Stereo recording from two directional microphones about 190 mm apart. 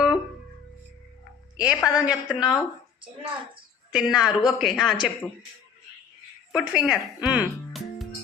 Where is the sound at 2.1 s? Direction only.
5° right (ahead or behind).